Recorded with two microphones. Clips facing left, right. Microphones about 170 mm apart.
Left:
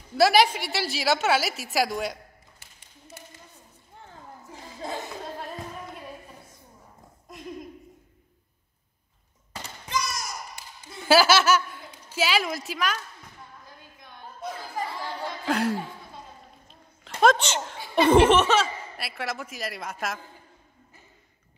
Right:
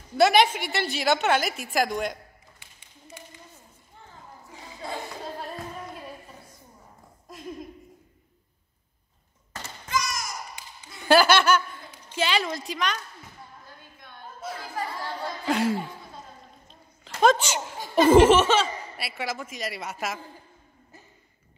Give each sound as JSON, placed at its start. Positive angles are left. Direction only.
{"t": 0.1, "sound": "speech", "side_deg": 0}
{"t": 9.8, "sound": "a sound", "side_deg": 25}
{"t": 11.0, "sound": "a woman's voice", "side_deg": 5}
{"t": 15.4, "sound": "speech", "side_deg": 0}
{"t": 17.2, "sound": "speech", "side_deg": -5}